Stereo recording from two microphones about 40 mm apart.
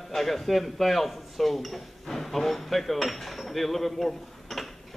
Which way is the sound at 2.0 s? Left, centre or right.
Centre.